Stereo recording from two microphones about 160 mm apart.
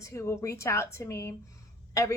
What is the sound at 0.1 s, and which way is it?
A woman's voice, 15° left (ahead or behind).